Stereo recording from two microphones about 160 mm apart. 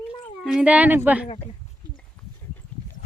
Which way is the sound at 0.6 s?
10° right (ahead or behind).